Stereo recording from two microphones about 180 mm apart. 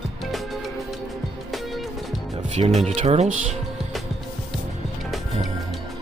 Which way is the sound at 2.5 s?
35° right (ahead or behind).